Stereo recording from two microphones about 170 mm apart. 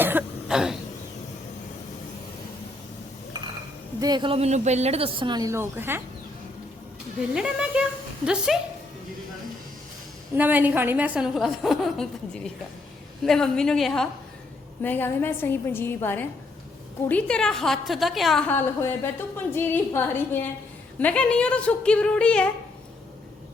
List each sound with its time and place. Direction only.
0.0 s cough: 10° right (ahead or behind)
4.0 s a woman's voice: 25° right (ahead or behind)
7.2 s a woman's voice: 5° right (ahead or behind)
10.3 s a woman's voice: 10° right (ahead or behind); by 22.4 s 5° left (ahead or behind)